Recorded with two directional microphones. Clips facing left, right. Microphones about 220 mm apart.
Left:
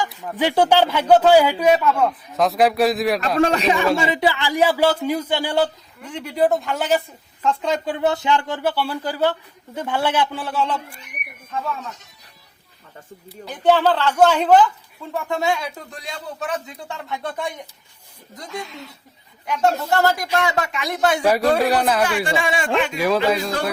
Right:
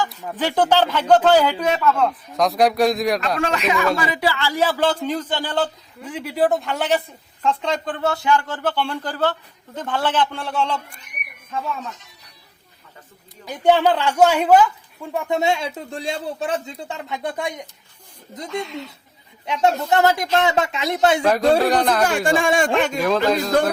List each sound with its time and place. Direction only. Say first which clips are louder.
0.0 s speech: left 2 dB; 15° left (ahead or behind)
3.4 s speech: left 4 dB; 35° left (ahead or behind); by 5.7 s 10° left (ahead or behind)
6.0 s speech: even; 5° right (ahead or behind)
7.9 s speech: right 1 dB; 20° left (ahead or behind); by 11.0 s centre (ahead or behind)
13.4 s a woman's voice: even; 15° right (ahead or behind)
18.6 s speech: right 5 dB; centre (ahead or behind)
19.5 s speech: right 1 dB; 20° right (ahead or behind)
21.2 s speech: right 1 dB; 10° left (ahead or behind)
22.0 s speech: right 3 dB; 45° right (ahead or behind)
23.0 s speech: left 1 dB; 5° left (ahead or behind)